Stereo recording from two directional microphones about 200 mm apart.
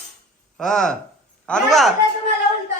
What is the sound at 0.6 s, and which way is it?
A man's voice, centre (ahead or behind).